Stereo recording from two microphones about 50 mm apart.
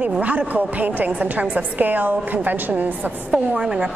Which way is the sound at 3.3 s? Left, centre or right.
Centre.